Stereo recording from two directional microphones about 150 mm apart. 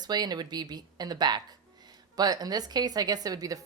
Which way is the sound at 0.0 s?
30° right (ahead or behind).